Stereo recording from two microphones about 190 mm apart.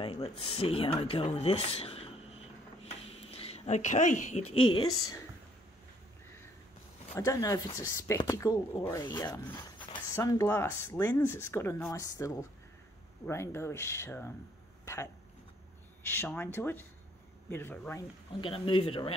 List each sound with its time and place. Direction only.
0.0 s speech: 30° left (ahead or behind)
7.2 s speech: 15° left (ahead or behind)
16.0 s speech: 10° left (ahead or behind)
18.4 s speech: 30° left (ahead or behind)